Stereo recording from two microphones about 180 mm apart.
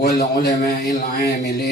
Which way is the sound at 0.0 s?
65° left (ahead or behind).